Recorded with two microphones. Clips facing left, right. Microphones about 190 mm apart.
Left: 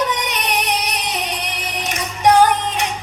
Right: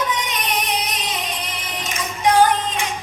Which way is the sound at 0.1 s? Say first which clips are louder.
Left 2 dB; 70° left (ahead or behind).